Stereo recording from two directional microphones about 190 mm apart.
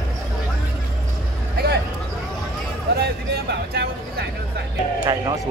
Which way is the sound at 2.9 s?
55° right (ahead or behind).